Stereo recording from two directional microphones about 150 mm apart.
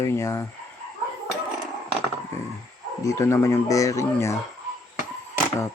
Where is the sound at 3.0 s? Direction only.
20° left (ahead or behind).